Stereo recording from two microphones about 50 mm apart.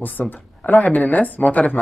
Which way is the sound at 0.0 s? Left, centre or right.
Left.